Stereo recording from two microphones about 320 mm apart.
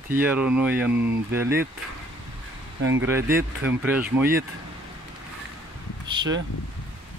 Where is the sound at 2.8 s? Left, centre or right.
Right.